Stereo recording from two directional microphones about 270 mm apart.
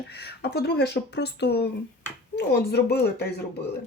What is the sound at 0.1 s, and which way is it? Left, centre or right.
Speech, left.